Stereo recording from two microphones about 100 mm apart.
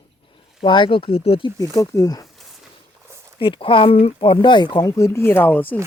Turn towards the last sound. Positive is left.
turn(degrees=20)  # may be behind; listen again after turning